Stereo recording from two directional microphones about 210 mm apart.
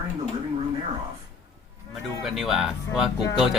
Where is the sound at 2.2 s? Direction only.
Centre (ahead or behind).